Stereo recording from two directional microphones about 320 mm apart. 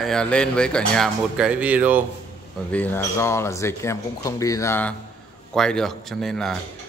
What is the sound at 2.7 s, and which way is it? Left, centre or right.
Speech, centre.